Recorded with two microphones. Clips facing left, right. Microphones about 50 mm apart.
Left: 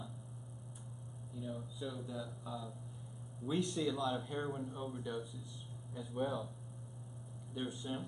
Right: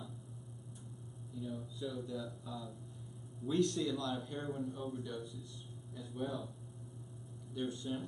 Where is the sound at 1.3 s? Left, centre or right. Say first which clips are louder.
Right 1 dB; centre.